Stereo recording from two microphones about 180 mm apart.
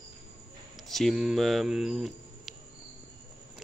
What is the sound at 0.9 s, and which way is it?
Speech, centre (ahead or behind).